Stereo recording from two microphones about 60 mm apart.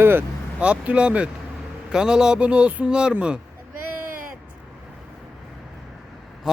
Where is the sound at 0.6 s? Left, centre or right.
Right.